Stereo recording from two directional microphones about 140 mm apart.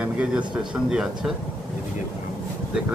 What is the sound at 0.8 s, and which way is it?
Speech, 5° right (ahead or behind).